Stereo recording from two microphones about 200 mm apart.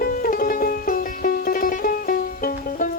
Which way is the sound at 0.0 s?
45° left (ahead or behind).